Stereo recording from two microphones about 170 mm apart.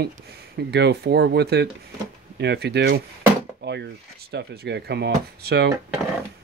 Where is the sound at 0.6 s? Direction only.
75° right (ahead or behind).